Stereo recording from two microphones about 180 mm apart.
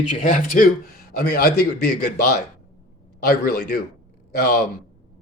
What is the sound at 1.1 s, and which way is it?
Speech, 60° left (ahead or behind).